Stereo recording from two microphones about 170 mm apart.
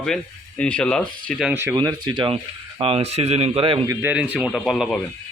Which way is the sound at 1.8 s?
30° right (ahead or behind).